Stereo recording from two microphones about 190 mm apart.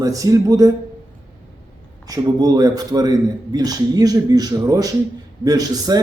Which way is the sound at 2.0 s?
20° right (ahead or behind).